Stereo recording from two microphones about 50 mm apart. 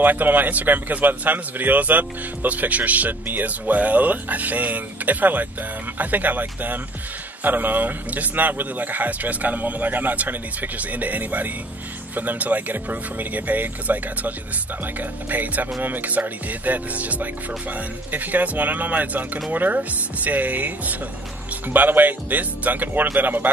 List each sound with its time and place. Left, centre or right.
0.0 s a man's voice: right